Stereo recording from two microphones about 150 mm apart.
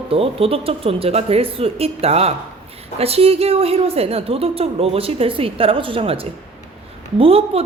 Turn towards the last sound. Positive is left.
turn(degrees=-40)  # may be behind; listen again after turning